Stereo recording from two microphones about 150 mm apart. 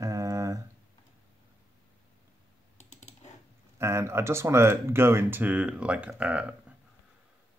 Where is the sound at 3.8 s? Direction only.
20° right (ahead or behind).